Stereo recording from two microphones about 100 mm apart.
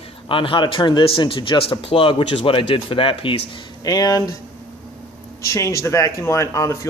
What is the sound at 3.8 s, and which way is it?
Speech, 40° left (ahead or behind).